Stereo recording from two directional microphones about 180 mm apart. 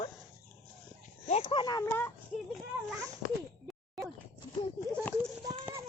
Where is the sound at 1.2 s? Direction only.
30° left (ahead or behind); by 2.1 s 15° left (ahead or behind).